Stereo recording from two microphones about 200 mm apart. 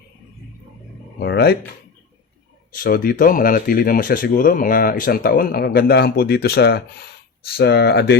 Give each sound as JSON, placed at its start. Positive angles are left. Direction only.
{"t": 1.2, "sound": "speech", "side_deg": 55}
{"t": 2.7, "sound": "speech", "side_deg": 45}